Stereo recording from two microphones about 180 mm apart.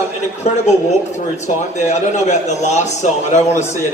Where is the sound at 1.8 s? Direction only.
40° left (ahead or behind).